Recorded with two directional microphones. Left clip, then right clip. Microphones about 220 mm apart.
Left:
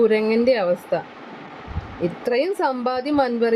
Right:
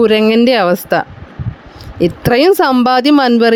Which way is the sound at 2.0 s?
40° right (ahead or behind).